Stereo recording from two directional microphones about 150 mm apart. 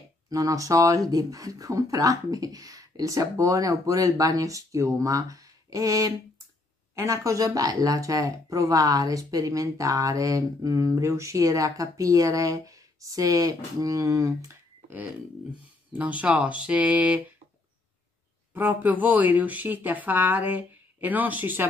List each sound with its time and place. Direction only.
0.3 s speech: 20° right (ahead or behind)
15.9 s speech: 10° right (ahead or behind)
18.5 s speech: 15° right (ahead or behind)